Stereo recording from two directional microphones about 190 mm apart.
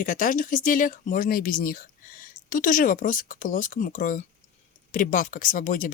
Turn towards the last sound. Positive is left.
turn(degrees=45)  # may be behind; listen again after turning